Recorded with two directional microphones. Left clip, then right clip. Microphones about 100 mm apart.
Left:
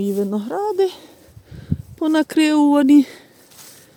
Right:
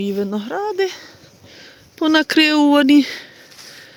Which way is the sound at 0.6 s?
90° left.